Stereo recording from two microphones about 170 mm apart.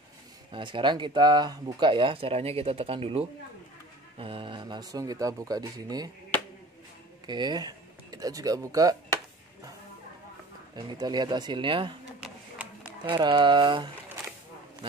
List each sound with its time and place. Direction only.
0.5 s speech: 30° right (ahead or behind)
7.2 s speech: 25° right (ahead or behind)
10.8 s speech: 25° right (ahead or behind)
13.2 s speech: 30° right (ahead or behind)